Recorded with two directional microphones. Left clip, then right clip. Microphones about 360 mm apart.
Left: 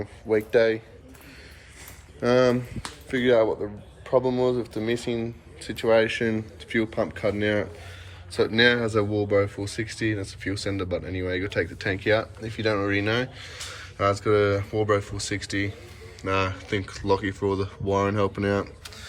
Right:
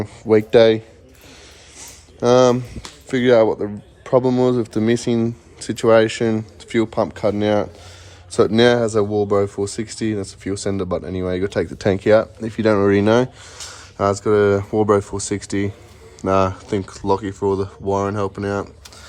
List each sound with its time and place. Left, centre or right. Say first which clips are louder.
0.5 s speech: right 9 dB; centre
1.8 s a sound: right 8 dB; centre
3.1 s speech: right 7 dB; right